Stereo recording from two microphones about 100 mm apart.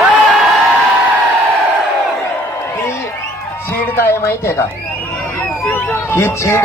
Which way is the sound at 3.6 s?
20° left (ahead or behind).